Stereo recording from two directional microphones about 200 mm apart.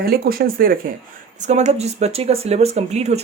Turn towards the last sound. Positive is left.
turn(degrees=-35)  # may be behind; listen again after turning